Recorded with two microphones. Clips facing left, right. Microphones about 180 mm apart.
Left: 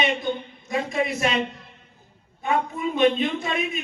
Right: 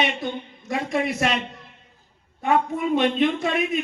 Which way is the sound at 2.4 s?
75° right (ahead or behind).